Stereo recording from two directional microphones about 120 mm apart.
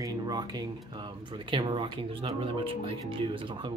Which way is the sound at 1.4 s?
45° right (ahead or behind).